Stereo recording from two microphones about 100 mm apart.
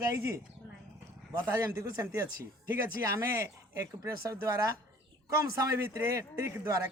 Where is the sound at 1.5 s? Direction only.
25° right (ahead or behind).